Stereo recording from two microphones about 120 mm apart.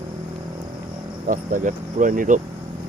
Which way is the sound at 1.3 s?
90° right.